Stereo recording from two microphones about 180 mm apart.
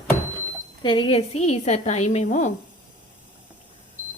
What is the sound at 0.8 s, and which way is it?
A woman's voice, 25° left (ahead or behind).